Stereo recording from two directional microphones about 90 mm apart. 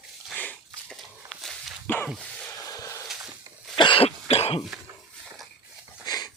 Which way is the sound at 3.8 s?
75° left (ahead or behind).